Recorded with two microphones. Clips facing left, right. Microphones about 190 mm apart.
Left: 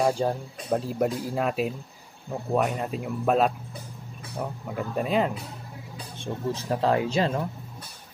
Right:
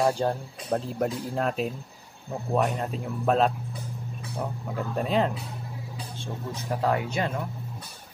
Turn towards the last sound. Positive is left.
turn(degrees=30)  # may be behind; listen again after turning